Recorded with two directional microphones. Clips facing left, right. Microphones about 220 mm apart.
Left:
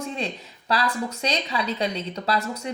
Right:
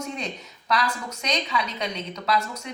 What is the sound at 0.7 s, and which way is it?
Speech, 30° left (ahead or behind).